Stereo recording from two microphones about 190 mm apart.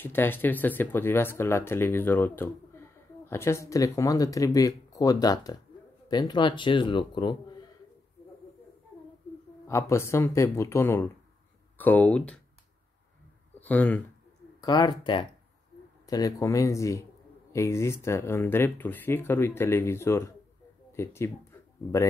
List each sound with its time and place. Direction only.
0.0 s speech: 10° left (ahead or behind)
9.7 s speech: 15° left (ahead or behind)
13.6 s speech: 10° left (ahead or behind)
14.6 s speech: 20° left (ahead or behind)
20.9 s a sound: 15° left (ahead or behind)